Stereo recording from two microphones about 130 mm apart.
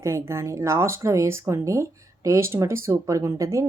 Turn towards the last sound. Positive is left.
turn(degrees=-25)  # may be behind; listen again after turning